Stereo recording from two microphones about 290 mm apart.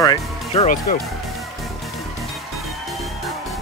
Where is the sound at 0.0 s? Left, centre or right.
Centre.